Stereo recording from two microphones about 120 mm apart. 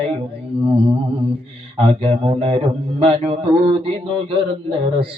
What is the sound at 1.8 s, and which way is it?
Mantra, 45° right (ahead or behind).